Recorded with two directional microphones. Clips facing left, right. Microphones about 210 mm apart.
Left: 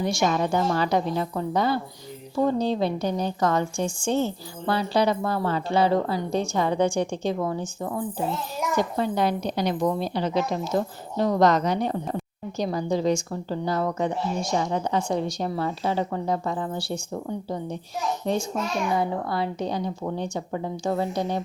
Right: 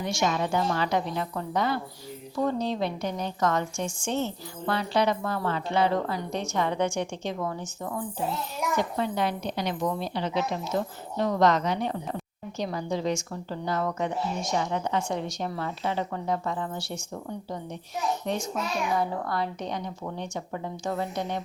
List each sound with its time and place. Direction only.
0.0 s a woman's voice: 35° left (ahead or behind)
18.3 s a woman's voice: 35° left (ahead or behind)